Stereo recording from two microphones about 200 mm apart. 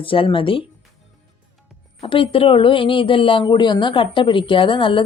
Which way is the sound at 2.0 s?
25° left (ahead or behind).